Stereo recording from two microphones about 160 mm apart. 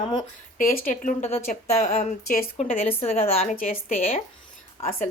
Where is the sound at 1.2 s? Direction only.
40° left (ahead or behind).